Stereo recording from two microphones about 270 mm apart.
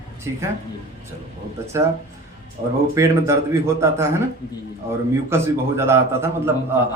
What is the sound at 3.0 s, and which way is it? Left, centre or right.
Speech, centre.